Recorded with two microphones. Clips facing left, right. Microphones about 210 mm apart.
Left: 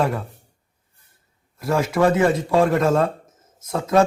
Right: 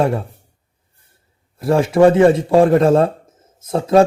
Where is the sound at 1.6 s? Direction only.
30° right (ahead or behind).